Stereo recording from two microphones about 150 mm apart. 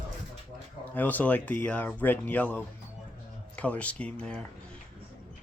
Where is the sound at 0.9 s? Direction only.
10° left (ahead or behind).